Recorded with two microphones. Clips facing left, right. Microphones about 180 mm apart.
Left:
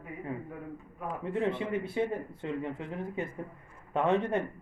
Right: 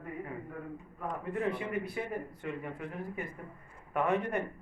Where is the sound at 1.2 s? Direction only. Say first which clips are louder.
Left 4 dB; 25° left (ahead or behind).